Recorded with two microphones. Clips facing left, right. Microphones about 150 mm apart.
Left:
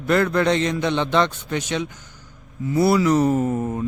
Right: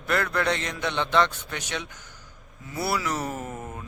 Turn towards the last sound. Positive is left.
turn(degrees=30)  # may be behind; listen again after turning